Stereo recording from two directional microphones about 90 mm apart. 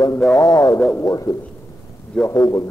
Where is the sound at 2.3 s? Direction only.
40° left (ahead or behind).